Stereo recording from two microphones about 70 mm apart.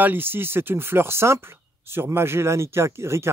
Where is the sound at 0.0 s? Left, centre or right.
Right.